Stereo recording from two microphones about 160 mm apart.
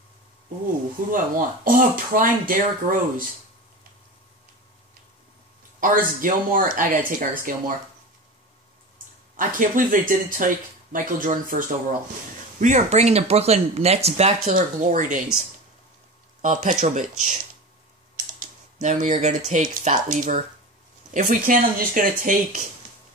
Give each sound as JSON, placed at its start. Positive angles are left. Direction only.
{"t": 1.1, "sound": "speech", "side_deg": -60}
{"t": 5.8, "sound": "speech", "side_deg": -55}
{"t": 9.4, "sound": "speech", "side_deg": -55}
{"t": 14.5, "sound": "speech", "side_deg": -55}
{"t": 16.3, "sound": "speech", "side_deg": -50}
{"t": 18.1, "sound": "typing", "side_deg": -55}
{"t": 19.5, "sound": "speech", "side_deg": -55}